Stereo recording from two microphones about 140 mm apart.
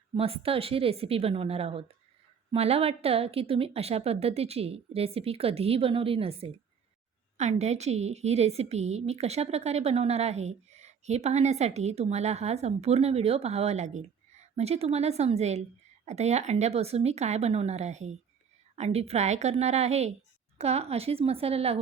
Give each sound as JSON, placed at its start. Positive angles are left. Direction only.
{"t": 0.1, "sound": "a woman's voice", "side_deg": -45}
{"t": 7.3, "sound": "a woman's voice", "side_deg": -55}